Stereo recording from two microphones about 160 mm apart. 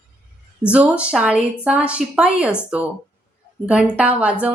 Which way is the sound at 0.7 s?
10° right (ahead or behind).